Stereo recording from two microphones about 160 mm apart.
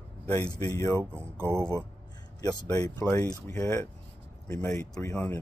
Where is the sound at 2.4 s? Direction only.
25° left (ahead or behind).